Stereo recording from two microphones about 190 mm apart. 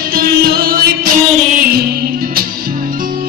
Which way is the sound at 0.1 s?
50° right (ahead or behind).